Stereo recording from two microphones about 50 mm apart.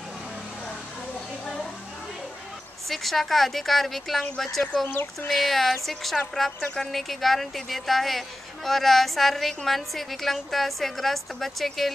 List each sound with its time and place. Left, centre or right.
2.9 s a woman's voice: centre
4.8 s speech: left
5.3 s a woman's voice: centre